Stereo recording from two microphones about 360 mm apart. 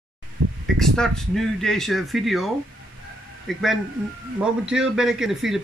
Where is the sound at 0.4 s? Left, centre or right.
Right.